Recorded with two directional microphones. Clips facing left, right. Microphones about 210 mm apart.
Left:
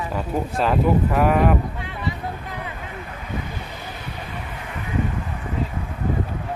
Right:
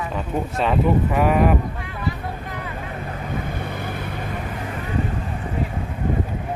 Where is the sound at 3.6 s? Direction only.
55° right (ahead or behind).